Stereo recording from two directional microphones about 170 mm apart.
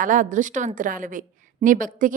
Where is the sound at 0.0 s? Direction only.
50° right (ahead or behind).